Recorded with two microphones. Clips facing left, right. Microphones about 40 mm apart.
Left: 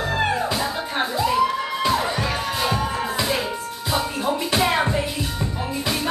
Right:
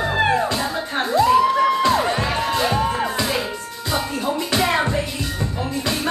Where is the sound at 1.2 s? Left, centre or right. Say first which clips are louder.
Right 7 dB; centre.